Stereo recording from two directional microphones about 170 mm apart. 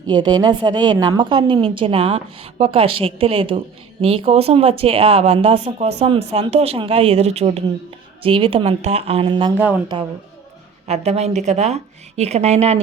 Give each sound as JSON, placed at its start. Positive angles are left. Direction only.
{"t": 0.1, "sound": "a woman's voice", "side_deg": -25}
{"t": 10.8, "sound": "a woman's voice", "side_deg": -40}